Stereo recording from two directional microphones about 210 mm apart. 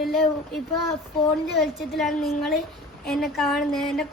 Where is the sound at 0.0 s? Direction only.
Centre (ahead or behind).